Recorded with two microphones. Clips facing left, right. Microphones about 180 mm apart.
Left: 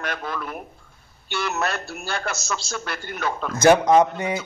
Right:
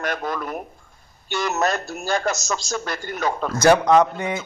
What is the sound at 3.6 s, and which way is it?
Speech, 20° left (ahead or behind).